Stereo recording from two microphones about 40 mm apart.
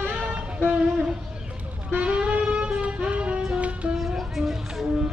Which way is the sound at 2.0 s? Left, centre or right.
Right.